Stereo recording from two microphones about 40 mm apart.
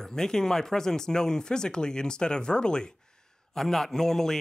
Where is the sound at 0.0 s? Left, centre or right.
Centre.